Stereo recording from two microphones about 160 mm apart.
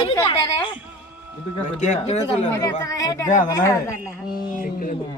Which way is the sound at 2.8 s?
20° left (ahead or behind).